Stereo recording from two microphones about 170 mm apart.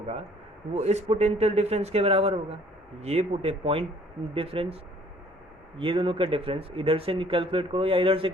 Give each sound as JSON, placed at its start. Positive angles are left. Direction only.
{"t": 0.7, "sound": "speech", "side_deg": -40}